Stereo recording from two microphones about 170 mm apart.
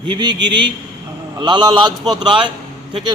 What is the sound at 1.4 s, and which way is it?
A man's voice, 25° right (ahead or behind).